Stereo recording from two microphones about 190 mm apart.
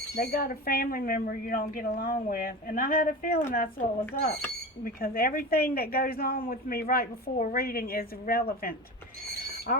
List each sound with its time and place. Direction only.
0.2 s a woman's voice: 50° left (ahead or behind)
4.8 s a woman's voice: 50° left (ahead or behind)